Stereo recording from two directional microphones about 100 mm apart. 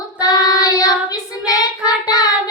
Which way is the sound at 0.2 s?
40° left (ahead or behind).